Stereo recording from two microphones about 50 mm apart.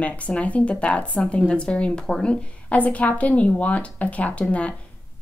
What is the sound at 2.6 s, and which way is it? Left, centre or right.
A woman's voice, left.